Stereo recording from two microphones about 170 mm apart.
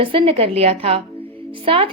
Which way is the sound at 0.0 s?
30° right (ahead or behind).